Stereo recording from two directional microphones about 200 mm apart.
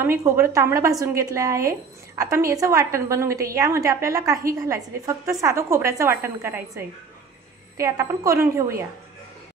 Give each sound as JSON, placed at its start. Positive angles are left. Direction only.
{"t": 0.0, "sound": "a woman's voice", "side_deg": -10}